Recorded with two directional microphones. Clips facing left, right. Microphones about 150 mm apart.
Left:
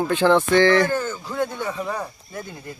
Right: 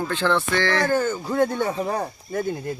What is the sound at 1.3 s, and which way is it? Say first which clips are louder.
Speech: right 4 dB; 35° right (ahead or behind).